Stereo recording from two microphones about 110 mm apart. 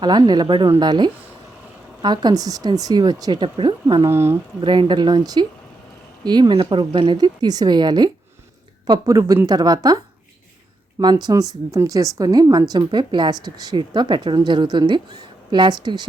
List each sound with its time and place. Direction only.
0.0 s a woman's voice: 40° right (ahead or behind)
4.0 s speech: 25° right (ahead or behind)
4.6 s a woman's voice: 45° right (ahead or behind)
11.0 s a woman's voice: 40° right (ahead or behind)